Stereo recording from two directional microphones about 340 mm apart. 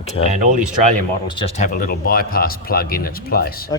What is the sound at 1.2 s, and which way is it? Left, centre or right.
Speech, centre.